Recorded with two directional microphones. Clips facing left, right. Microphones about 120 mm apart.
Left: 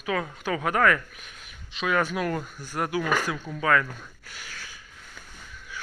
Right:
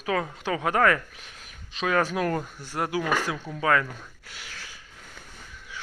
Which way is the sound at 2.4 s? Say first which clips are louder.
Even; 25° right (ahead or behind).